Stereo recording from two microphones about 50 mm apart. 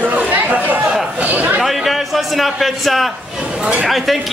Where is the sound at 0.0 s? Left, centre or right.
Right.